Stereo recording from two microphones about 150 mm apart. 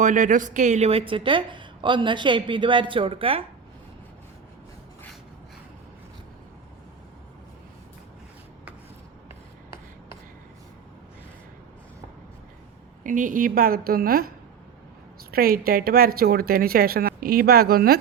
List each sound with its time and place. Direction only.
0.0 s a woman's voice: 55° right (ahead or behind); by 3.4 s 40° right (ahead or behind)
13.0 s a woman's voice: 60° right (ahead or behind); by 14.3 s 80° right
15.3 s speech: 85° right